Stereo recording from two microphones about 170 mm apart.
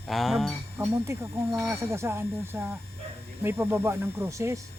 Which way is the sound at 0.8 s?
15° right (ahead or behind).